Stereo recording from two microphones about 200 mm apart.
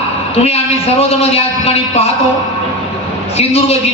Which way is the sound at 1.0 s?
30° left (ahead or behind).